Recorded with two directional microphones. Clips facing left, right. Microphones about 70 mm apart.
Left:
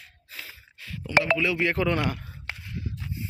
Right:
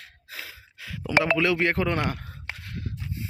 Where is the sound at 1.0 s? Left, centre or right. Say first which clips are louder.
Right 1 dB; right.